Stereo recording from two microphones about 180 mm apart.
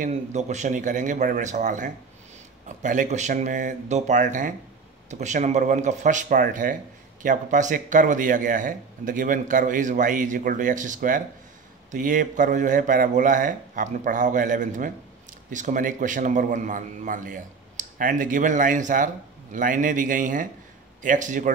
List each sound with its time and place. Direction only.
0.0 s speech: 40° right (ahead or behind)